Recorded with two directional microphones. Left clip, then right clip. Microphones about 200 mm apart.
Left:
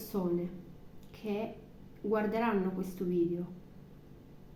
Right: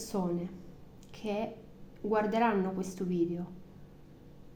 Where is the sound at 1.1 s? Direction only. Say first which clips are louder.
Right 2 dB; 45° right (ahead or behind).